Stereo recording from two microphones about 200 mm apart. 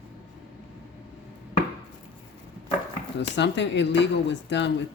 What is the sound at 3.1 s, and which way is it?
Speech, 60° left (ahead or behind).